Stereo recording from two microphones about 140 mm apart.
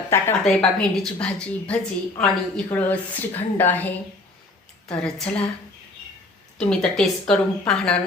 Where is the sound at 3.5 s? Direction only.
10° left (ahead or behind).